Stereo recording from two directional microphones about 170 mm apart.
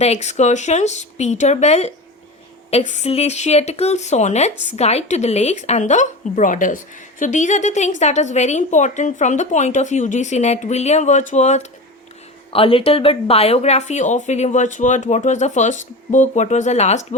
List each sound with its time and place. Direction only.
0.0 s speech: 40° left (ahead or behind)